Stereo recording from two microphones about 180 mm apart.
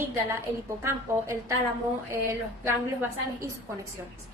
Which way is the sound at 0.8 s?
15° right (ahead or behind).